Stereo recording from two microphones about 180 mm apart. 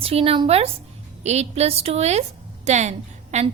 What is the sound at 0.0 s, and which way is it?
A woman's voice, 35° right (ahead or behind).